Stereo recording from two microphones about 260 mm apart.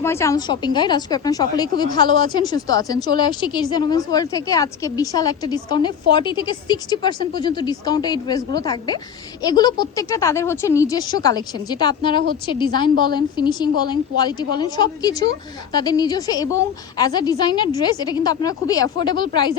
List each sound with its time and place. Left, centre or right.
0.0 s a woman's voice: centre